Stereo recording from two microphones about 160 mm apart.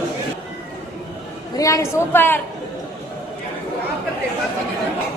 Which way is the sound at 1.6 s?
20° left (ahead or behind).